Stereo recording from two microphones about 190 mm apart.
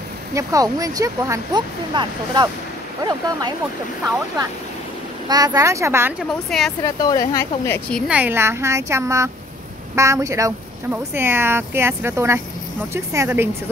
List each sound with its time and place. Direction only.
0.3 s speech: 15° right (ahead or behind)
5.3 s speech: 20° right (ahead or behind)
6.8 s speech: 20° left (ahead or behind)
8.1 s speech: 10° right (ahead or behind)